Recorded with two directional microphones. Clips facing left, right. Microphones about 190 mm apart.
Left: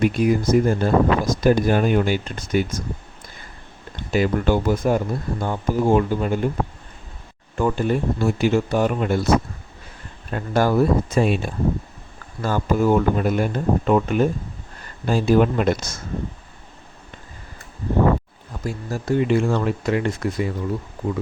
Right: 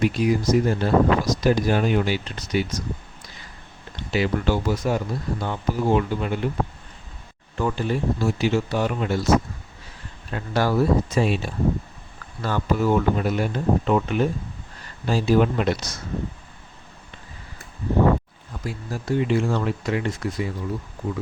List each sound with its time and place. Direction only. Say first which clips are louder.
0.0 s speech: left 2 dB; 55° left (ahead or behind)
3.9 s speech: left 3 dB; 50° left (ahead or behind)
7.6 s speech: left 3 dB; 50° left (ahead or behind)
10.3 s speech: left 3 dB; 50° left (ahead or behind)
18.6 s speech: left 4 dB; 45° left (ahead or behind)